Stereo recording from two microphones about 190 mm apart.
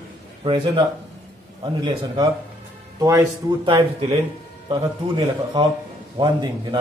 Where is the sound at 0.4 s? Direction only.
25° right (ahead or behind).